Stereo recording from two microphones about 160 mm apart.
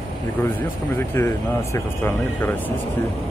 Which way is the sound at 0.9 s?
15° left (ahead or behind).